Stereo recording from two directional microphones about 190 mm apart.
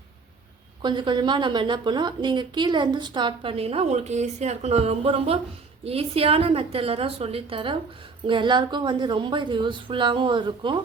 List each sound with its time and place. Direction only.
0.8 s a woman's voice: 25° right (ahead or behind)